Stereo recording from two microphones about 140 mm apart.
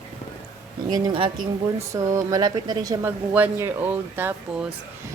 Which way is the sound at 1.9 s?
20° right (ahead or behind).